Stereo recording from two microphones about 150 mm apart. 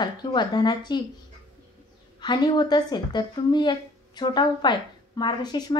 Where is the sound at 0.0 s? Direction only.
30° left (ahead or behind).